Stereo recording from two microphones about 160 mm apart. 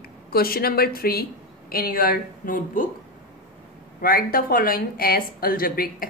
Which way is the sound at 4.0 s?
65° left (ahead or behind).